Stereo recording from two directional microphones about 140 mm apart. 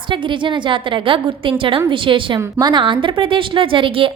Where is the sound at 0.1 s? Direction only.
35° right (ahead or behind).